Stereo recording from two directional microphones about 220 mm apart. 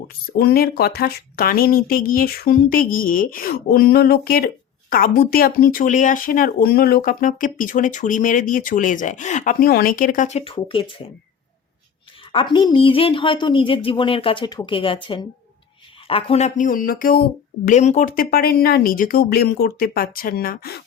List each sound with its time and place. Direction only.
0.1 s speech: 45° left (ahead or behind); by 10.9 s 25° left (ahead or behind)
12.3 s a woman's voice: 20° left (ahead or behind); by 20.8 s 45° left (ahead or behind)